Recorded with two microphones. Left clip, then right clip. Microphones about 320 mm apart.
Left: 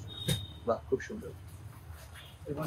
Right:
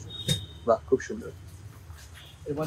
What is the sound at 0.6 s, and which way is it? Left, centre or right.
Speech, centre.